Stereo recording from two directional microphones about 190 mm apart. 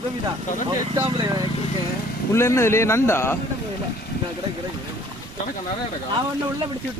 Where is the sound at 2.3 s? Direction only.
15° left (ahead or behind).